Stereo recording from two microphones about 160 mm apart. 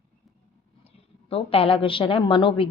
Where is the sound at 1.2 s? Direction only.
35° left (ahead or behind).